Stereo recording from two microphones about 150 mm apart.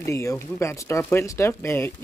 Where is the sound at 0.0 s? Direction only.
20° left (ahead or behind).